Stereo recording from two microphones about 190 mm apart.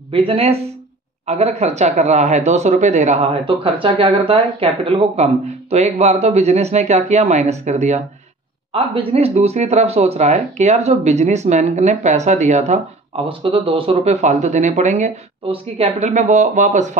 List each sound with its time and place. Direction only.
0.1 s speech: 30° right (ahead or behind)